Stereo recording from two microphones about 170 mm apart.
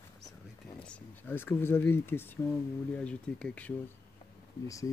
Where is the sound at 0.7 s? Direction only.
5° left (ahead or behind).